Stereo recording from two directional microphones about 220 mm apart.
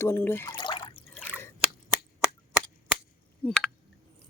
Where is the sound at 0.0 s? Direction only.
10° left (ahead or behind); by 1.0 s 25° left (ahead or behind).